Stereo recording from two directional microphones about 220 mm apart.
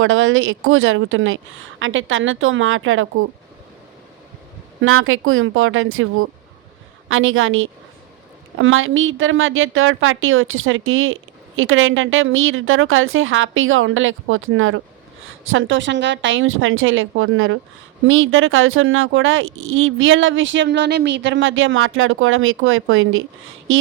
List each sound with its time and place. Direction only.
0.0 s a woman's voice: 60° right (ahead or behind)
4.8 s a woman's voice: 65° right (ahead or behind)